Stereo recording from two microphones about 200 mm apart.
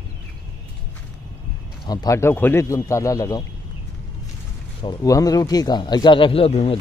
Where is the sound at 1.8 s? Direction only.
20° left (ahead or behind).